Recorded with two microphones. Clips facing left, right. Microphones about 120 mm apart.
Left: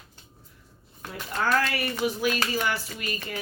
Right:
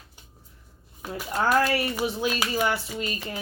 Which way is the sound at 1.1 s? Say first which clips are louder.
Right 3 dB; 10° right (ahead or behind).